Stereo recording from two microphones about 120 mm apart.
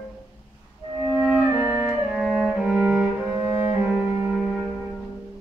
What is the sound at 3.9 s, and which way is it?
Music, centre (ahead or behind).